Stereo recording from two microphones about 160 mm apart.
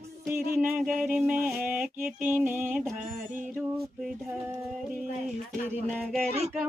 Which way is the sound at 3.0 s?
55° right (ahead or behind).